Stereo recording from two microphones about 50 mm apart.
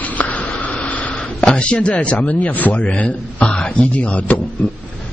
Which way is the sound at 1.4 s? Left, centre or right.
Centre.